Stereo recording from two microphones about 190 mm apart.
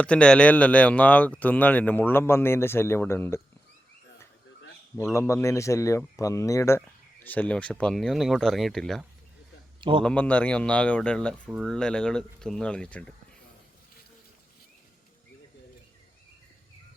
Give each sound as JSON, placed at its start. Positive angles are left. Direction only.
{"t": 0.0, "sound": "speech", "side_deg": 5}
{"t": 5.1, "sound": "speech", "side_deg": 15}